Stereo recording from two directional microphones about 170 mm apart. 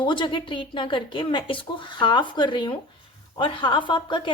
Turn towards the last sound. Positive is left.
turn(degrees=30)  # may be behind; listen again after turning